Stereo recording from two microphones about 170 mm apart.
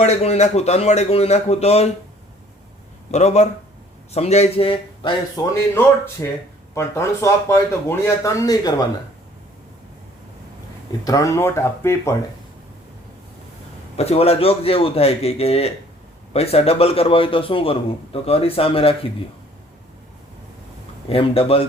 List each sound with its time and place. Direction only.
0.0 s a man's voice: 40° left (ahead or behind)
3.1 s a man's voice: 40° left (ahead or behind)
5.4 s speech: 20° left (ahead or behind)
11.0 s speech: 20° left (ahead or behind)
13.9 s a man's voice: 35° left (ahead or behind)
21.1 s a man's voice: 35° left (ahead or behind)